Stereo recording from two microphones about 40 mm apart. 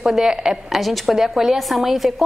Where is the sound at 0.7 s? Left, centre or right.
Centre.